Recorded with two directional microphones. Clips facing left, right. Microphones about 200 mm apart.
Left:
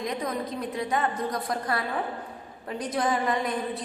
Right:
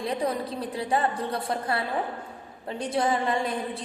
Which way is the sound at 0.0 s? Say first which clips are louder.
Right 2 dB; 30° right (ahead or behind).